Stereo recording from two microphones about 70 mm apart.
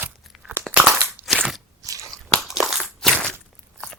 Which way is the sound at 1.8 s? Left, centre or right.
Right.